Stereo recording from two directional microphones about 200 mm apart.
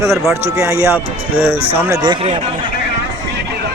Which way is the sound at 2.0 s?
25° right (ahead or behind).